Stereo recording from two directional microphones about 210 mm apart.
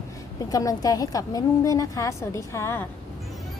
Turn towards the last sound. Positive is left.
turn(degrees=10)  # may be behind; listen again after turning